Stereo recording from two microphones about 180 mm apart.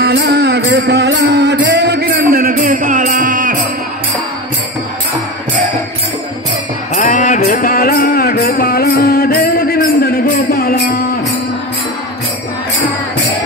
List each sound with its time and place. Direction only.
0.0 s music: 60° right (ahead or behind)
7.0 s music: 45° left (ahead or behind)